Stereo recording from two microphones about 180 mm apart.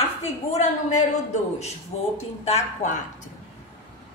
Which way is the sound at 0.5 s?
40° left (ahead or behind).